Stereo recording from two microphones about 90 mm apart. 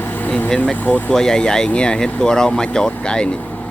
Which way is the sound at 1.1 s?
5° left (ahead or behind).